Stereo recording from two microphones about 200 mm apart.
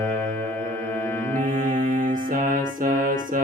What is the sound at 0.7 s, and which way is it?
Music, 15° left (ahead or behind).